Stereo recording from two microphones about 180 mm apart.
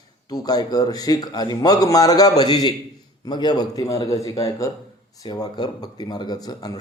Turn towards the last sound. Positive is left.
turn(degrees=20)  # may be behind; listen again after turning